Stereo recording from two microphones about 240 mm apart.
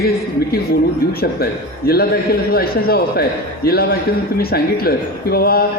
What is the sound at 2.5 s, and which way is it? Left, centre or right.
Speech, left.